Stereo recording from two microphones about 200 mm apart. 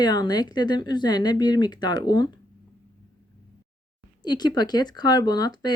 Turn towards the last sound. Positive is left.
turn(degrees=20)  # may be behind; listen again after turning